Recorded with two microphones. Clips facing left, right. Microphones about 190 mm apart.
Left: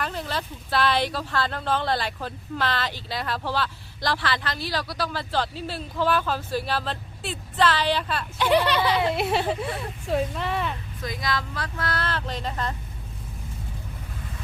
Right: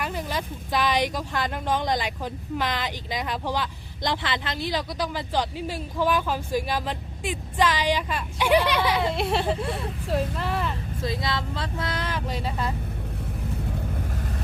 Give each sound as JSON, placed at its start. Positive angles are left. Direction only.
{"t": 0.0, "sound": "speech", "side_deg": -10}
{"t": 9.0, "sound": "speech", "side_deg": 5}
{"t": 11.0, "sound": "speech", "side_deg": -25}